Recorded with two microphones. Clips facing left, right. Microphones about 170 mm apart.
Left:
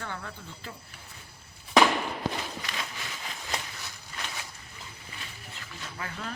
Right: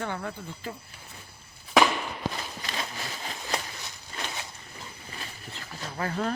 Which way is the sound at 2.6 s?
35° right (ahead or behind).